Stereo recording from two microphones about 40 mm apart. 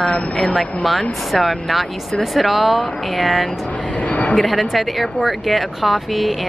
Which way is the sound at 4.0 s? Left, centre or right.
Left.